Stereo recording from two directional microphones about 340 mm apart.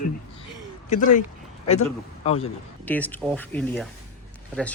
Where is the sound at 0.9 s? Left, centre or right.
Left.